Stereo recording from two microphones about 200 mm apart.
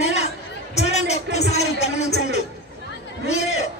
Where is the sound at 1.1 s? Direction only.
35° left (ahead or behind).